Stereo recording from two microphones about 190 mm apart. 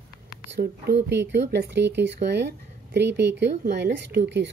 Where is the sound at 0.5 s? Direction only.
60° right (ahead or behind).